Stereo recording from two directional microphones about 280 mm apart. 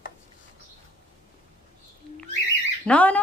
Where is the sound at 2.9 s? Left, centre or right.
Centre.